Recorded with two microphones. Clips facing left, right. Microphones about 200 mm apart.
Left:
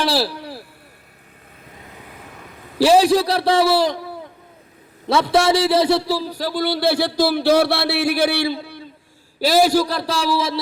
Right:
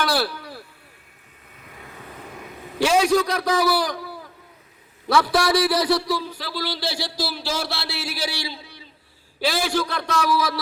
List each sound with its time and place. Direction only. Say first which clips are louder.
0.0 s a sound: left 3 dB; 30° left (ahead or behind)
2.7 s a man's voice: left 5 dB; 35° left (ahead or behind); by 8.9 s 55° left (ahead or behind)
9.4 s a man's voice: left 8 dB; 40° left (ahead or behind)